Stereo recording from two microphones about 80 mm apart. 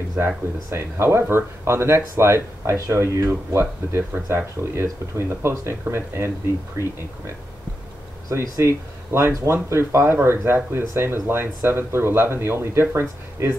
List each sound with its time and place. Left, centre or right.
0.2 s speech: right
8.3 s speech: right